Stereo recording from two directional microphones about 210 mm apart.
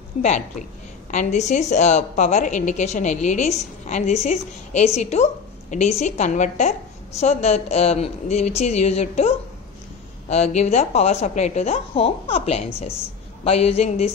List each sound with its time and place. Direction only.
0.2 s a woman's voice: 35° left (ahead or behind)